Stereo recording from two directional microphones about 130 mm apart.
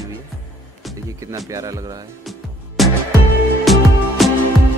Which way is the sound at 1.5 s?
25° right (ahead or behind).